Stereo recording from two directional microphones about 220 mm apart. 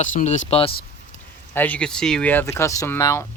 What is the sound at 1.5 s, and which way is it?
Speech, 10° left (ahead or behind).